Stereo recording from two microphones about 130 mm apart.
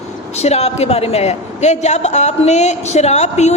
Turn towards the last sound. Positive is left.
turn(degrees=60)  # may be behind; listen again after turning